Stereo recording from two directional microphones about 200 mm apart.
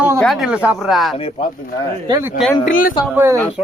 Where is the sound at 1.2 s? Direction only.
25° left (ahead or behind).